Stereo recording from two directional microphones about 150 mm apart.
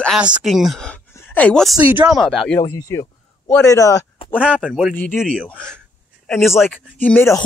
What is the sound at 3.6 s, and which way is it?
Speech, 20° left (ahead or behind).